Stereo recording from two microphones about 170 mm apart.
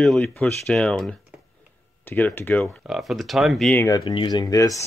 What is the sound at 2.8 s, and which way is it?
Speech, centre (ahead or behind).